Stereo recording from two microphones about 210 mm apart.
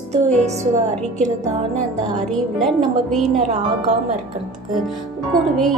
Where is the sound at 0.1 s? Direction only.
30° right (ahead or behind).